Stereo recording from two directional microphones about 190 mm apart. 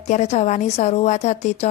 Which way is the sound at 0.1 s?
35° left (ahead or behind).